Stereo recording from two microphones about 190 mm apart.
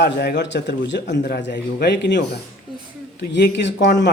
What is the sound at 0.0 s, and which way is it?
A man's voice, 60° left (ahead or behind).